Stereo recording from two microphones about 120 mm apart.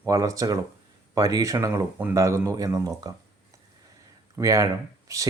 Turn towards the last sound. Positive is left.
turn(degrees=-25)  # may be behind; listen again after turning